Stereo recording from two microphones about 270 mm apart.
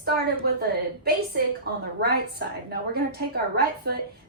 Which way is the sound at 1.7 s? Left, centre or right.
Right.